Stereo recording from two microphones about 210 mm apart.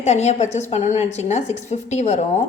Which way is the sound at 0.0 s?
30° left (ahead or behind).